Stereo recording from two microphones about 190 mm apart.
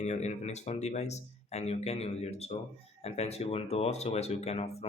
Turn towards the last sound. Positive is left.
turn(degrees=35)  # may be behind; listen again after turning